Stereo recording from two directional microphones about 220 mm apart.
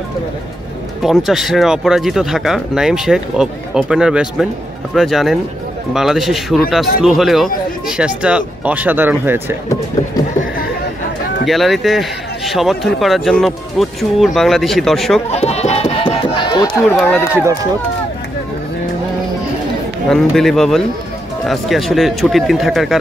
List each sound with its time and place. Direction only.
1.0 s speech: centre (ahead or behind)
11.4 s speech: centre (ahead or behind)
15.3 s a sound: 30° left (ahead or behind)
16.9 s a man's voice: 10° left (ahead or behind)
20.1 s speech: centre (ahead or behind)